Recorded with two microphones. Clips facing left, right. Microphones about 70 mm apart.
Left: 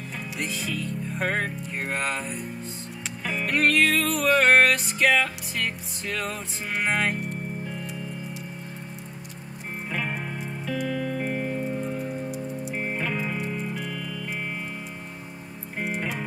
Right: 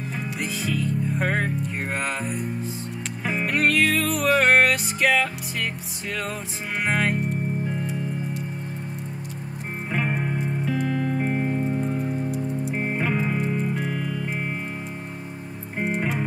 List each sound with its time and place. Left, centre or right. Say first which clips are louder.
0.4 s music: right 3 dB; centre
6.8 s music: right 2 dB; centre
9.9 s music: right 6 dB; centre
12.3 s music: right 5 dB; centre
12.7 s music: right 3 dB; centre